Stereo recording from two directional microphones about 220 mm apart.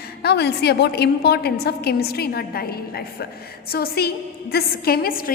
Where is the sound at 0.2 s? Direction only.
50° left (ahead or behind).